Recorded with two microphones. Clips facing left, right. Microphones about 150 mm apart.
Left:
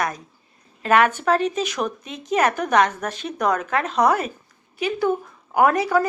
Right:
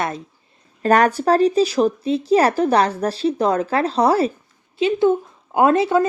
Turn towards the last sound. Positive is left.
turn(degrees=-25)  # may be behind; listen again after turning